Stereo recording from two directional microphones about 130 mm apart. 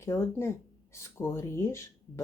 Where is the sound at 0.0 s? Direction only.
20° left (ahead or behind).